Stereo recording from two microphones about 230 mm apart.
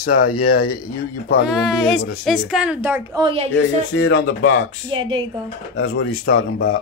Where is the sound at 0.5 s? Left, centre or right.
Left.